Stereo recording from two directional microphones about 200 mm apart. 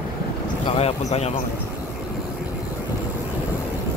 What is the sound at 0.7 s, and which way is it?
Speech, 30° left (ahead or behind).